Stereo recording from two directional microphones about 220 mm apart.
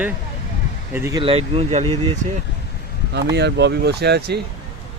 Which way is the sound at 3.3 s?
50° right (ahead or behind).